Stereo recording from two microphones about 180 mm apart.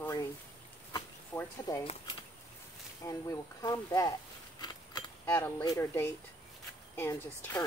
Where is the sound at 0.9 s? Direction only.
15° left (ahead or behind).